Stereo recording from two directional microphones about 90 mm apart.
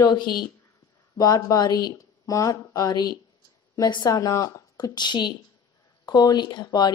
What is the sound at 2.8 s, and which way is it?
A woman's voice, 50° left (ahead or behind).